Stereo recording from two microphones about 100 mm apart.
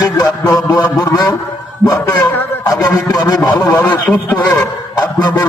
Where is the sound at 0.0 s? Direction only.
40° left (ahead or behind).